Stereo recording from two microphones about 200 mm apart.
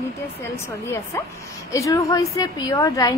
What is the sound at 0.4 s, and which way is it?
A woman's voice, 15° left (ahead or behind).